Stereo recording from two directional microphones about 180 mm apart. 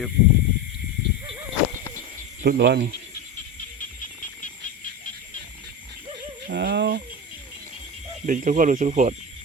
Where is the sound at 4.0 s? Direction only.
45° left (ahead or behind).